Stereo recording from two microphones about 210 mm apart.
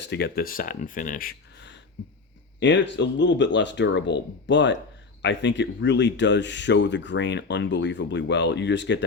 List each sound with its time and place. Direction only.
0.1 s speech: 50° left (ahead or behind)